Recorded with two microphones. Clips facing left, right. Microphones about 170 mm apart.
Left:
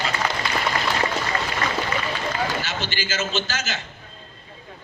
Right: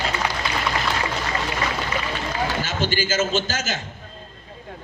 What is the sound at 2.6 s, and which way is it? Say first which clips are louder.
A man's voice: right 5 dB; 50° right (ahead or behind).